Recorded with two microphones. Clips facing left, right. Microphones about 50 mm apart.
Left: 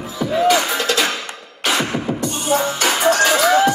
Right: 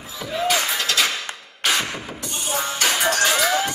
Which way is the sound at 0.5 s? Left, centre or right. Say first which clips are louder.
Left 4 dB; left.